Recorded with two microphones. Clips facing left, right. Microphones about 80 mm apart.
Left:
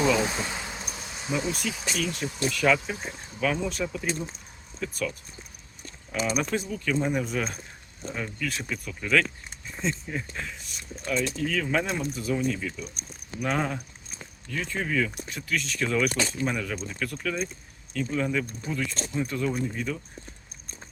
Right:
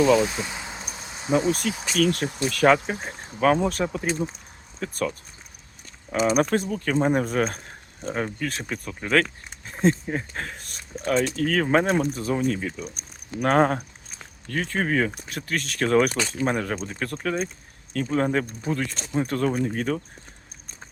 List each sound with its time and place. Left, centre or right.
0.2 s speech: centre
0.4 s a sound: centre
0.9 s speech: right
6.1 s speech: right
9.6 s speech: right
13.4 s speech: right